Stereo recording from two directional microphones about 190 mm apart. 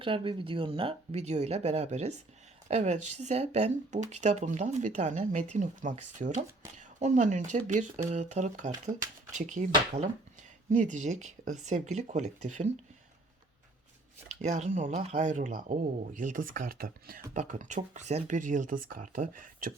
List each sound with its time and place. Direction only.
0.0 s speech: 25° right (ahead or behind)
14.3 s speech: 35° right (ahead or behind)